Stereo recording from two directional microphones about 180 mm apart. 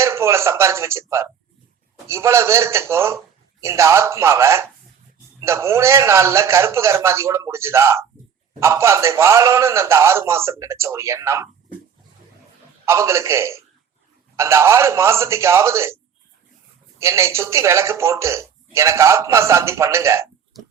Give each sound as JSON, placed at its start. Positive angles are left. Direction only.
{"t": 0.0, "sound": "a man's voice", "side_deg": -15}
{"t": 12.8, "sound": "speech", "side_deg": -15}
{"t": 17.0, "sound": "speech", "side_deg": -15}